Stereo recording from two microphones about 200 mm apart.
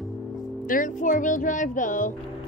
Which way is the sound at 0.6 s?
40° left (ahead or behind).